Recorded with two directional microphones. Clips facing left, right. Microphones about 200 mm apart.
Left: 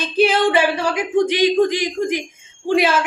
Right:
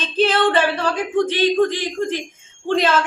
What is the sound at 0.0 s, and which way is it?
A woman's voice, 10° left (ahead or behind).